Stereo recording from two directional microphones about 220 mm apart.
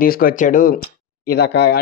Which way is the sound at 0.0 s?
40° left (ahead or behind).